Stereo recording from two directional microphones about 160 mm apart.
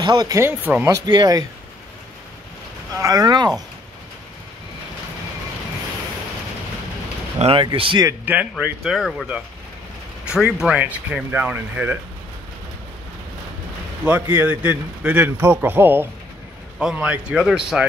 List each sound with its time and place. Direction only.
0.0 s speech: 25° right (ahead or behind)
1.0 s speech: 25° right (ahead or behind)
3.0 s speech: 25° right (ahead or behind)
7.3 s speech: 35° right (ahead or behind)
8.3 s a man's voice: 10° right (ahead or behind)
14.3 s a man's voice: 10° right (ahead or behind)